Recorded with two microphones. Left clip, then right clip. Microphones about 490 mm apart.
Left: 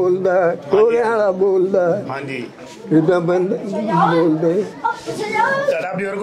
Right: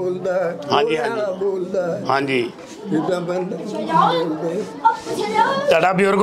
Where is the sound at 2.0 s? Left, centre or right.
Right.